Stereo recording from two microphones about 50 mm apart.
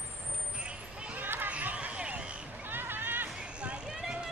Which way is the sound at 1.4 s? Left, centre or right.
Right.